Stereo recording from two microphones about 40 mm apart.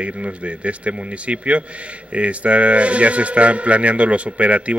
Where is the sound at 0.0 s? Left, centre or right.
Right.